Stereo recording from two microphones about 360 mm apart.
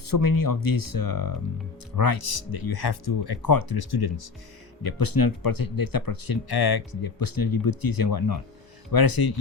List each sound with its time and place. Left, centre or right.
0.0 s speech: left
4.8 s speech: left